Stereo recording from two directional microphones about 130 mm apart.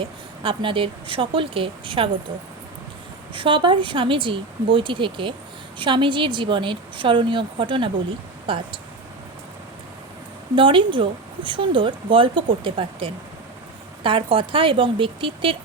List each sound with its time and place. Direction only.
0.0 s speech: 40° right (ahead or behind)
3.3 s speech: 40° right (ahead or behind)
10.5 s speech: 40° right (ahead or behind)